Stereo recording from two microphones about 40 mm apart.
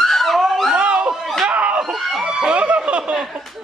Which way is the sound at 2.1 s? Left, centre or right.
Centre.